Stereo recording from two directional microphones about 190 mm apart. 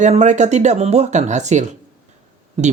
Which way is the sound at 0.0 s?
40° right (ahead or behind).